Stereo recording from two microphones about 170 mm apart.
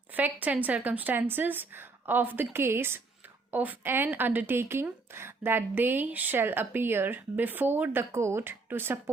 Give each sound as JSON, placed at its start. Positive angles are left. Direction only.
{"t": 0.1, "sound": "speech", "side_deg": -10}